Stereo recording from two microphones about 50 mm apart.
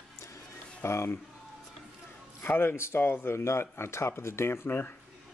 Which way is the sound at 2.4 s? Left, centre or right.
Left.